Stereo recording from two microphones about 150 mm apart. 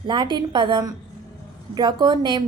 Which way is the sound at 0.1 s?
30° right (ahead or behind).